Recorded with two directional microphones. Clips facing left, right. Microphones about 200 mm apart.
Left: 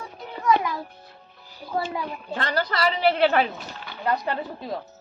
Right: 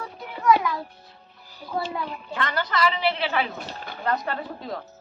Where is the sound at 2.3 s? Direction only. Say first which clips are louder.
Left 1 dB; 35° left (ahead or behind); by 3.4 s 50° left (ahead or behind).